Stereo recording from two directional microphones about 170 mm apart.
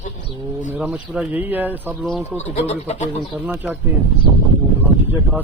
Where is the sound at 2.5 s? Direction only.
40° left (ahead or behind).